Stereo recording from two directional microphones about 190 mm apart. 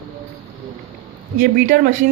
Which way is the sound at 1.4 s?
50° right (ahead or behind).